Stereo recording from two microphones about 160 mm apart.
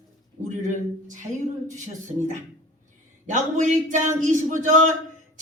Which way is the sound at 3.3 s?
50° right (ahead or behind).